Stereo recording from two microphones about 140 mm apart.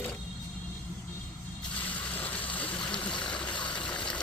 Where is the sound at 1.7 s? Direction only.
10° left (ahead or behind).